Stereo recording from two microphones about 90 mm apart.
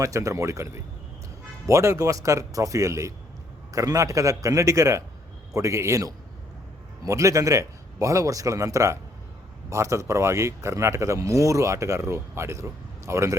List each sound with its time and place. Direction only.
0.0 s speech: 35° right (ahead or behind)